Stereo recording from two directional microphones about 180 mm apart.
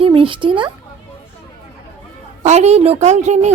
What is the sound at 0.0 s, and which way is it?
Speech, 30° right (ahead or behind).